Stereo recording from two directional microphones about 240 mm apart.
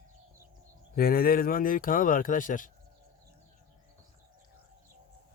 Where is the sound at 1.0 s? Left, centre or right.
Left.